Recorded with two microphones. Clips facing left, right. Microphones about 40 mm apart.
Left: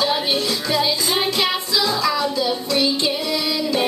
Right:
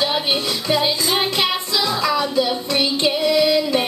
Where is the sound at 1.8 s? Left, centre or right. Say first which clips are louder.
Right 1 dB; right.